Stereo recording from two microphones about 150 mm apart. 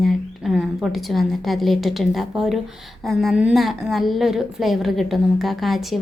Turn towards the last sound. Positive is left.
turn(degrees=0)  # may be behind; listen again after turning